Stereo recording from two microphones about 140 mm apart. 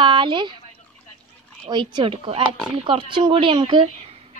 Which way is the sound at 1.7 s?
35° right (ahead or behind).